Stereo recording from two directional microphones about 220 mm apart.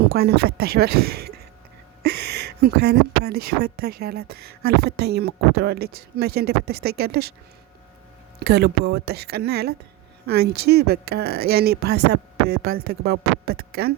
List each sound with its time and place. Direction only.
0.0 s a woman's voice: 45° right (ahead or behind)
8.4 s a woman's voice: 50° right (ahead or behind)